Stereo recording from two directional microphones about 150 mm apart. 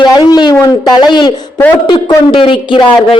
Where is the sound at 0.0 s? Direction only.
30° left (ahead or behind).